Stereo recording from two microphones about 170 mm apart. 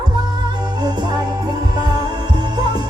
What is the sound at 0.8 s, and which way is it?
Music, 25° right (ahead or behind).